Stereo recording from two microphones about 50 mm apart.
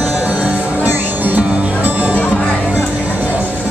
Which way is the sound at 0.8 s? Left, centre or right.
Right.